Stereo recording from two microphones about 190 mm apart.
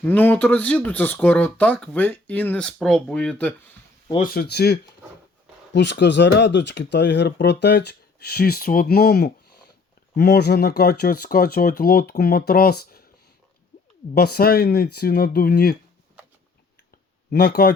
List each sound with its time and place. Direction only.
0.0 s speech: 10° left (ahead or behind)
4.2 s speech: 55° left (ahead or behind)
14.2 s speech: 55° left (ahead or behind)
17.3 s speech: 55° left (ahead or behind)